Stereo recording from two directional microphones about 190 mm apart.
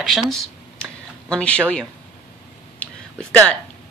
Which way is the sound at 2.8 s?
5° left (ahead or behind).